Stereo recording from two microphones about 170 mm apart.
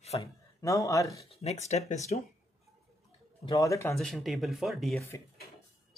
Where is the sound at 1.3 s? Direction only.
40° left (ahead or behind).